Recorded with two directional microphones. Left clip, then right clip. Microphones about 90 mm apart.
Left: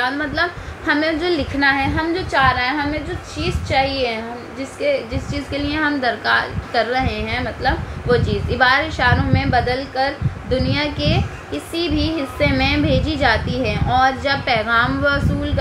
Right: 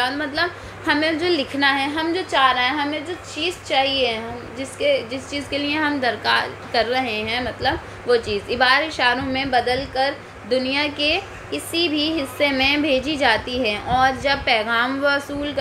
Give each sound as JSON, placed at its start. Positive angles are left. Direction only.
{"t": 0.0, "sound": "a woman's voice", "side_deg": -35}